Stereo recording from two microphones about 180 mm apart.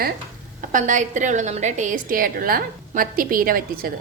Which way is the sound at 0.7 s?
45° right (ahead or behind).